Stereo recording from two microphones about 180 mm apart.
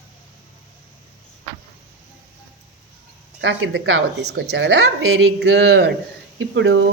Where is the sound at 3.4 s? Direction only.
90° right; by 5.9 s 75° right (ahead or behind).